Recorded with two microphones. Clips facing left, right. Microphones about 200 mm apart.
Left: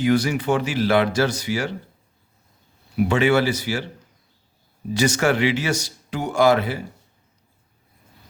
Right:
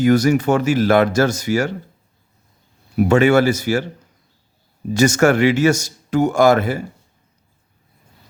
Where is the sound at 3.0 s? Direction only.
45° right (ahead or behind).